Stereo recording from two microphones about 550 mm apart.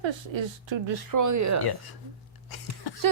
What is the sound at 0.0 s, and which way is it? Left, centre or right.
Speech, right.